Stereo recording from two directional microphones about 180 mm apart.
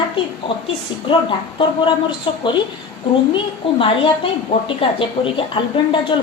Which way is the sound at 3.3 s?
30° left (ahead or behind).